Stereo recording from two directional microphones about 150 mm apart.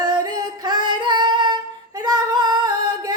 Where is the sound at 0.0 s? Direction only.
30° right (ahead or behind).